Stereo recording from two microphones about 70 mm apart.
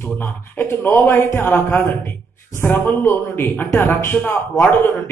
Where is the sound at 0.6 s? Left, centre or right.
Left.